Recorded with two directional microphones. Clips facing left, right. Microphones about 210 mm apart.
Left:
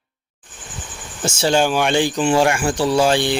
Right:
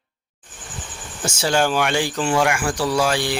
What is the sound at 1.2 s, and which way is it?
Speech, 25° left (ahead or behind).